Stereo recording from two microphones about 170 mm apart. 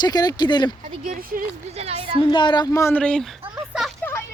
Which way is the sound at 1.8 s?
35° right (ahead or behind).